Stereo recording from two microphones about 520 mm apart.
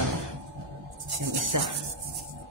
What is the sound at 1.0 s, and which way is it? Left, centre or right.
Speech, right.